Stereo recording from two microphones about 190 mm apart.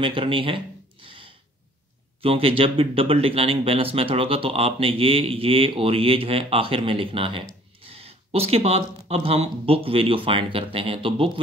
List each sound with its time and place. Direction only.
0.0 s speech: 25° right (ahead or behind)
1.0 s a sound: 25° right (ahead or behind)
2.2 s speech: 30° right (ahead or behind)